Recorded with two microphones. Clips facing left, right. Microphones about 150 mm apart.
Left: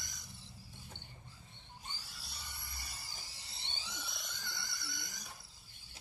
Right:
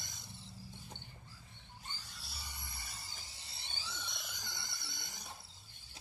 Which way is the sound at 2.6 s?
20° right (ahead or behind).